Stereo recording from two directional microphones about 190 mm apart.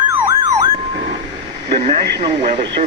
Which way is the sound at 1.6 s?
30° right (ahead or behind).